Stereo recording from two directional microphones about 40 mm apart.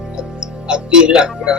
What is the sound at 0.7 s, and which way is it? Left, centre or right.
Speech, right.